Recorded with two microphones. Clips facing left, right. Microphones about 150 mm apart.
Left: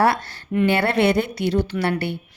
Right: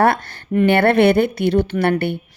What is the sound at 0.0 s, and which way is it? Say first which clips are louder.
A woman's voice: right 3 dB; 55° right (ahead or behind).